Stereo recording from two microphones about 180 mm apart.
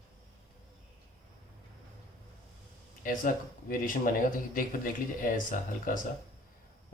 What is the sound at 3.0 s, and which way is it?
Speech, 50° left (ahead or behind).